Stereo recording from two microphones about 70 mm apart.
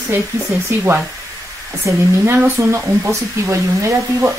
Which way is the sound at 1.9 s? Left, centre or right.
Right.